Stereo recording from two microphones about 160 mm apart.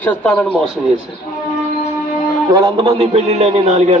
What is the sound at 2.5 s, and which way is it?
Speech, 25° right (ahead or behind).